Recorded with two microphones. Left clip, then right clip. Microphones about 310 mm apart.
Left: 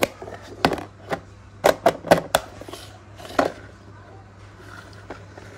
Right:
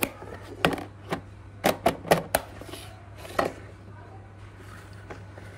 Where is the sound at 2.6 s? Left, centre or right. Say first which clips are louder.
Left 3 dB; centre.